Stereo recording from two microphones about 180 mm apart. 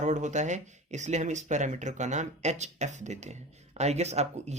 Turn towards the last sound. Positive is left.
turn(degrees=-40)  # may be behind; listen again after turning